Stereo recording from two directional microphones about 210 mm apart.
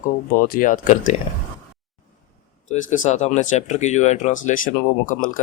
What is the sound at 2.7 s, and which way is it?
Speech, 35° left (ahead or behind).